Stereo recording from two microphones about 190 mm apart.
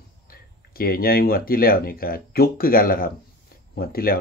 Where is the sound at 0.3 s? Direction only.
50° left (ahead or behind).